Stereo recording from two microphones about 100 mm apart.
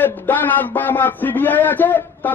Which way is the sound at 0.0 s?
20° left (ahead or behind).